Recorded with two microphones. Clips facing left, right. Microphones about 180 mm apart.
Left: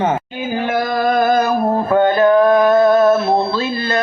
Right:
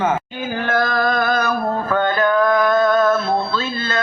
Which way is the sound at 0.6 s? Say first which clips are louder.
Left 1 dB; 15° left (ahead or behind).